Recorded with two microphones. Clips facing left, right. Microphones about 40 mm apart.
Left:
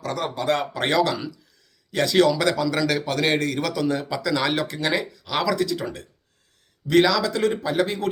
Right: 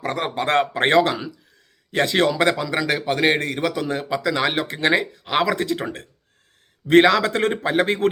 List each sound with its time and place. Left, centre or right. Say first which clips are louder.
0.0 s a man's voice: right 2 dB; right